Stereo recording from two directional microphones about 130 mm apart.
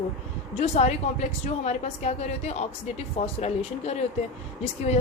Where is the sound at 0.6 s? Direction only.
60° left (ahead or behind).